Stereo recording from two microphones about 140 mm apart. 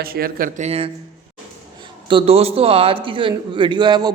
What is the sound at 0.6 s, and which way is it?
Speech, 45° right (ahead or behind).